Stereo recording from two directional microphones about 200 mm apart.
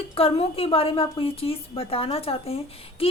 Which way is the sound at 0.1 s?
30° left (ahead or behind).